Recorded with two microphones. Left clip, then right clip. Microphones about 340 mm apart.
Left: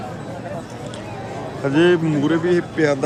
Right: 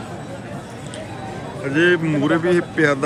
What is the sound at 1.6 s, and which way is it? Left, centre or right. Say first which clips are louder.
A man's voice: left 1 dB; centre.